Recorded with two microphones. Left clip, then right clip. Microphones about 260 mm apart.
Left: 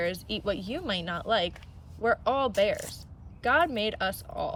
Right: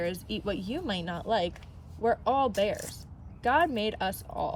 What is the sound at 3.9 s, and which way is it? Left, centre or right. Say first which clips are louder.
Speech: left 1 dB; centre.